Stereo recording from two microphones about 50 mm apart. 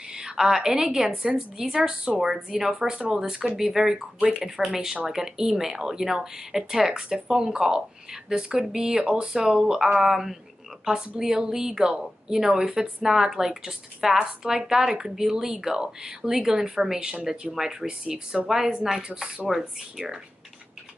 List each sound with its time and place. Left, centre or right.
0.1 s speech: centre